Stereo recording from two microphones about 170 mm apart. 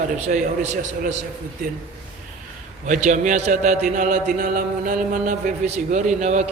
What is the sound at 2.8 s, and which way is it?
A man's voice, 45° right (ahead or behind).